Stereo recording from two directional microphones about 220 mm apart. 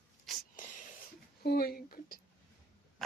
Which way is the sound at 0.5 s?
35° left (ahead or behind).